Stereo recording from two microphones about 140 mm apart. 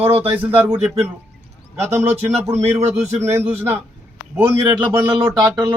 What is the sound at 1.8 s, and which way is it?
Speech, 20° right (ahead or behind).